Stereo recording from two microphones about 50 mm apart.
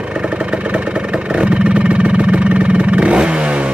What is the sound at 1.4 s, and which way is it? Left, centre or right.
Vehicle, right.